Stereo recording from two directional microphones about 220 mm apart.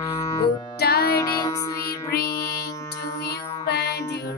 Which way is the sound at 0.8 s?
45° left (ahead or behind).